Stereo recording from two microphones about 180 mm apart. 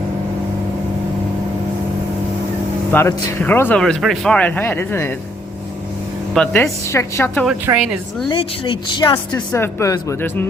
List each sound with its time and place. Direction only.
2.9 s speech: 15° left (ahead or behind)
6.3 s speech: 5° left (ahead or behind)
7.7 s a woman's voice: 5° right (ahead or behind)
8.3 s a woman's voice: 25° left (ahead or behind)